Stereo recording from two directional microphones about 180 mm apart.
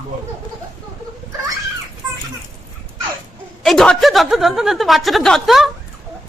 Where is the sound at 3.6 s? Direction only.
Centre (ahead or behind).